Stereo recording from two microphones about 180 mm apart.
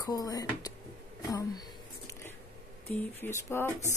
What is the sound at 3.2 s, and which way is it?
Speech, 15° left (ahead or behind).